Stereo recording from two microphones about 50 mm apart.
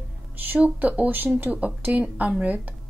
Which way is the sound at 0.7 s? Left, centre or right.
Right.